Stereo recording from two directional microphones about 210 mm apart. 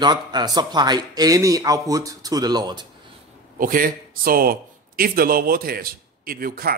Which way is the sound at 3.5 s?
40° right (ahead or behind).